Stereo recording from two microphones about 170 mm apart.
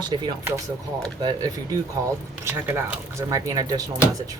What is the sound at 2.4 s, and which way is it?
Speech, 15° right (ahead or behind).